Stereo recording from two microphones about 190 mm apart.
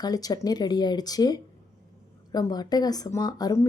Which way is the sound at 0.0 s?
20° left (ahead or behind).